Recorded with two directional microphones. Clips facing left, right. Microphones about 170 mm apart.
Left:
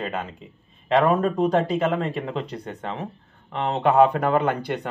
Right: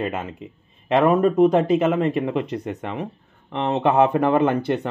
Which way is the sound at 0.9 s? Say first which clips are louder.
Right 3 dB; 20° right (ahead or behind).